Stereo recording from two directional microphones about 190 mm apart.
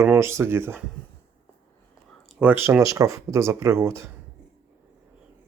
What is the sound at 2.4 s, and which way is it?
Speech, 10° right (ahead or behind).